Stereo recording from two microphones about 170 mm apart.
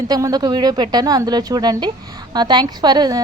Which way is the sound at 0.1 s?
25° right (ahead or behind).